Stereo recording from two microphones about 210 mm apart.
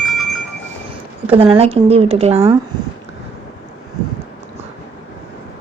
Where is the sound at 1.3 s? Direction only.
25° right (ahead or behind).